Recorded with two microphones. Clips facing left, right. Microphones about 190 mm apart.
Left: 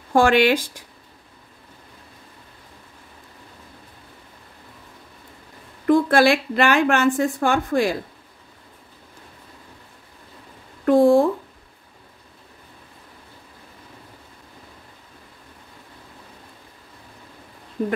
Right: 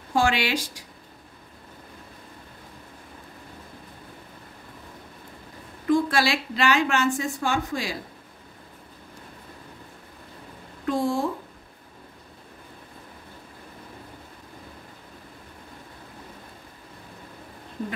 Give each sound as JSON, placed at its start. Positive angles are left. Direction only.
{"t": 0.1, "sound": "a woman's voice", "side_deg": 55}
{"t": 5.9, "sound": "a woman's voice", "side_deg": 55}
{"t": 10.9, "sound": "a sound", "side_deg": 55}